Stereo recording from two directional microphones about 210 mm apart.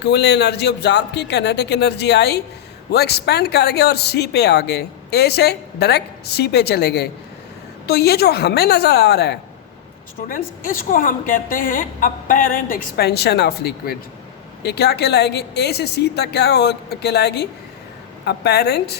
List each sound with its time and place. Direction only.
0.0 s a woman's voice: 55° left (ahead or behind)